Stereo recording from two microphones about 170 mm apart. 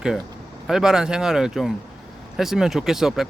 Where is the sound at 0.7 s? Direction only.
5° right (ahead or behind).